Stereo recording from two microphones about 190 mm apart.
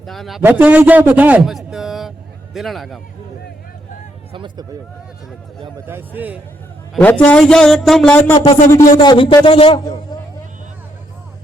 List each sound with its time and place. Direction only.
0.0 s a man's voice: centre (ahead or behind)
4.3 s speech: 25° right (ahead or behind)
5.9 s a man's voice: 10° right (ahead or behind)
6.9 s a man's voice: 5° left (ahead or behind)
8.7 s a man's voice: 25° left (ahead or behind)